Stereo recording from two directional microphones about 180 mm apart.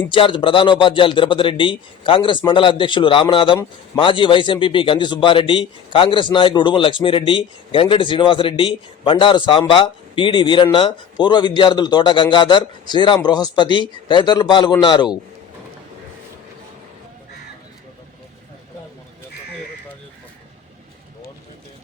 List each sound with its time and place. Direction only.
0.1 s a man's voice: 25° left (ahead or behind)